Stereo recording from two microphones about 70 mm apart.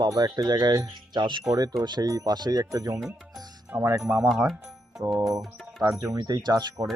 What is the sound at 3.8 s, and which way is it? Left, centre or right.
Speech, right.